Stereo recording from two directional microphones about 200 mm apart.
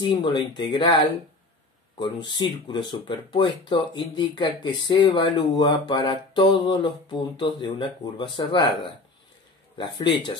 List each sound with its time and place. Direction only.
0.0 s speech: 25° left (ahead or behind)
9.8 s speech: 25° left (ahead or behind)